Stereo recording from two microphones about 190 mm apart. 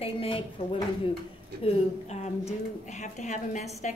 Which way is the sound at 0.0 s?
30° left (ahead or behind).